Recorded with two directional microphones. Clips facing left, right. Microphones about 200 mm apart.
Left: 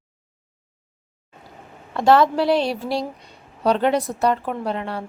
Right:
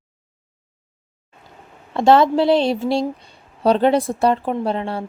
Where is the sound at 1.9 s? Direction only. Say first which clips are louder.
Right 2 dB; 25° right (ahead or behind).